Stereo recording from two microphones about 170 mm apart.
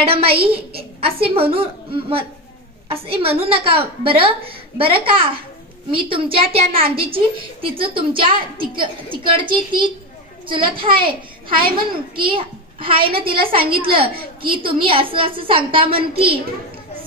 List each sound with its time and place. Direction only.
0.0 s a woman's voice: 35° right (ahead or behind)
0.3 s a woman's voice: 70° right (ahead or behind)
1.0 s a woman's voice: 35° right (ahead or behind)
11.4 s a child's voice: 55° right (ahead or behind)
12.2 s a woman's voice: 30° right (ahead or behind)